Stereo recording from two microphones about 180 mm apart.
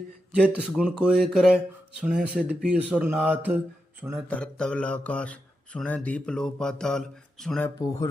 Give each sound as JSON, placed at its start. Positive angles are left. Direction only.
{"t": 0.4, "sound": "speech", "side_deg": -5}
{"t": 4.3, "sound": "mantra", "side_deg": 5}
{"t": 7.8, "sound": "mantra", "side_deg": 20}